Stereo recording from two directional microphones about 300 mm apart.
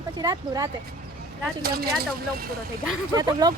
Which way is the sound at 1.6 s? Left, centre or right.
Right.